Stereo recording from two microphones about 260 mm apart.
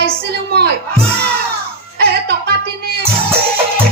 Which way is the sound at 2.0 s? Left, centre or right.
Right.